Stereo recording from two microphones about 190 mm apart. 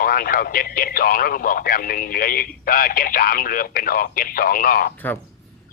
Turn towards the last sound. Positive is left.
turn(degrees=10)  # may be behind; listen again after turning